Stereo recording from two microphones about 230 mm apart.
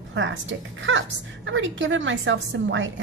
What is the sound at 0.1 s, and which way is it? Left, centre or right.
A woman's voice, right.